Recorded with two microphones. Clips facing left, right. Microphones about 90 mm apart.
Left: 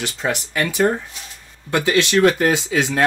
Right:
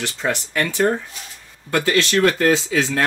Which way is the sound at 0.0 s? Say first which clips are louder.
Even; 15° left (ahead or behind).